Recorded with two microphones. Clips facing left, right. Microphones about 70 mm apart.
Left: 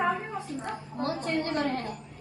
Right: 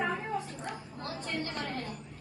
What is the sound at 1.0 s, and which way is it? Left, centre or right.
Speech, left.